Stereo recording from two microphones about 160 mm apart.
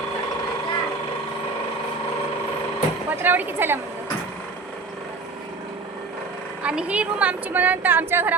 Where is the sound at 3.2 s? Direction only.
10° right (ahead or behind).